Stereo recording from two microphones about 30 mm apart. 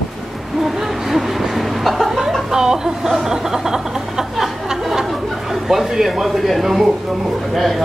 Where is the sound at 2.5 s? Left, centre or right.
Right.